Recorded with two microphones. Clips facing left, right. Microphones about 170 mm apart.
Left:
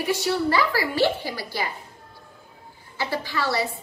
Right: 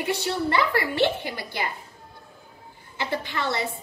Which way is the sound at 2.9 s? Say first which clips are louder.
Left 1 dB; 20° right (ahead or behind).